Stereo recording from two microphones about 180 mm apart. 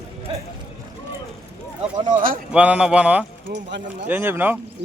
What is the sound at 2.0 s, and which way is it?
Speech, 50° right (ahead or behind).